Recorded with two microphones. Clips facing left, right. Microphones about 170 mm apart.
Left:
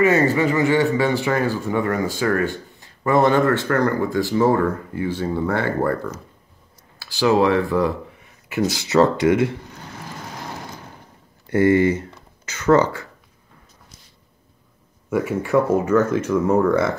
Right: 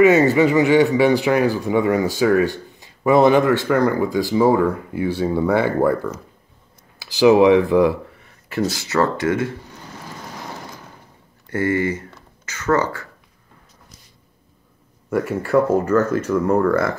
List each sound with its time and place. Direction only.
0.0 s speech: 20° right (ahead or behind)
7.0 s speech: 15° right (ahead or behind)
8.6 s speech: 15° left (ahead or behind)
11.4 s speech: 20° left (ahead or behind)
15.0 s speech: 5° left (ahead or behind)